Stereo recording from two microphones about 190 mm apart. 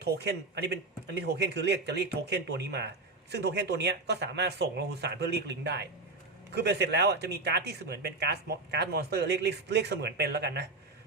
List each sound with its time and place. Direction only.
0.0 s speech: 60° right (ahead or behind)